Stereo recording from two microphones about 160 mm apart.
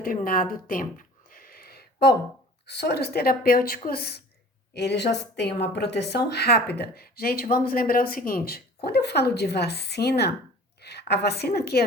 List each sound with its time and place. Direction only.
0.0 s a sound: 60° left (ahead or behind); by 2.1 s 85° left
2.6 s speech: 90° left; by 4.2 s 70° left (ahead or behind)
4.7 s a woman's voice: 90° left